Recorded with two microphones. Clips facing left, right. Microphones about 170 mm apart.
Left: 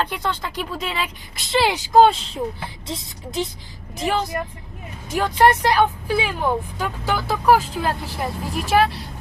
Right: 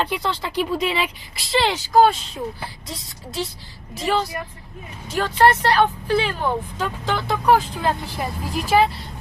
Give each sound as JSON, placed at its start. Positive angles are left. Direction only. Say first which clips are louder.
{"t": 0.0, "sound": "speech", "louder": "right 1 dB", "side_deg": -10}
{"t": 1.7, "sound": "speech", "louder": "left 2 dB", "side_deg": 20}